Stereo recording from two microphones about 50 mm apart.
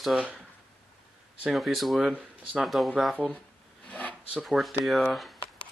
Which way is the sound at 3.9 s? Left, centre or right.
Left.